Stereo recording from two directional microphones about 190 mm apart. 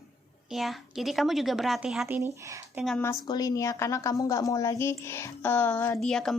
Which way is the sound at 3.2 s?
20° left (ahead or behind).